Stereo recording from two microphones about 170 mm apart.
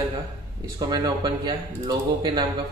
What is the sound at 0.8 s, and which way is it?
Speech, 25° right (ahead or behind).